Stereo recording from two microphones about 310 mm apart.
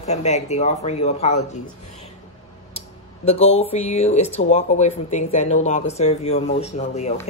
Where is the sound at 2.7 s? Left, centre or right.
Left.